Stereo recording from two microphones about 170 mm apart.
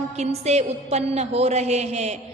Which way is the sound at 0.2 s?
40° right (ahead or behind).